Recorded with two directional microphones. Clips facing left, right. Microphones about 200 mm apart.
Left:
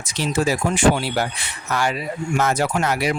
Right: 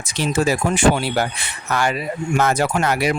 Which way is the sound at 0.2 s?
60° right (ahead or behind).